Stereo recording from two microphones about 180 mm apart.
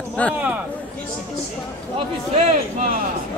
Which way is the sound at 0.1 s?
5° left (ahead or behind).